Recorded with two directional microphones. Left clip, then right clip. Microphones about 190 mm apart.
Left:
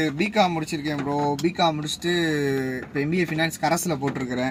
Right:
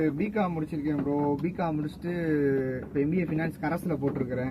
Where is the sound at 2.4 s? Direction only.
45° left (ahead or behind).